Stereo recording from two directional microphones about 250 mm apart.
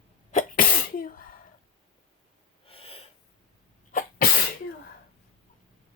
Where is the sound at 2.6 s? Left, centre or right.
Left.